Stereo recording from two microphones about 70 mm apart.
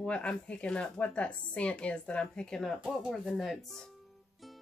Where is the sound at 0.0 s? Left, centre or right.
Centre.